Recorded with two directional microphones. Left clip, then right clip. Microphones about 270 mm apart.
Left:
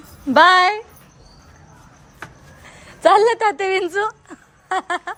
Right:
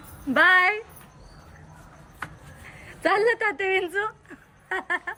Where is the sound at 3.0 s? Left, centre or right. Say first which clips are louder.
Left 8 dB; centre.